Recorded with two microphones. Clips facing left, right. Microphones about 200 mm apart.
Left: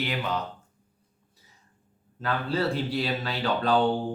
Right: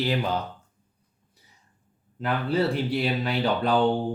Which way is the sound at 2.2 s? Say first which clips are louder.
Right 3 dB; 20° right (ahead or behind).